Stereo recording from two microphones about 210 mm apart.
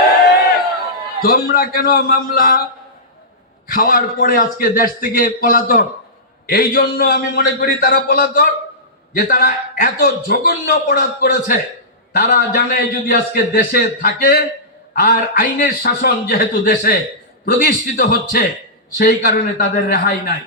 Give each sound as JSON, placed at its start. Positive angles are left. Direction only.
{"t": 1.2, "sound": "a man's voice", "side_deg": 45}
{"t": 3.7, "sound": "a man's voice", "side_deg": 40}